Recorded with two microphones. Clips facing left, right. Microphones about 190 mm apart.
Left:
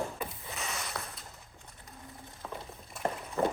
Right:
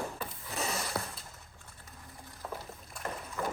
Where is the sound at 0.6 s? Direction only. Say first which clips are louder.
Right 5 dB; 35° right (ahead or behind).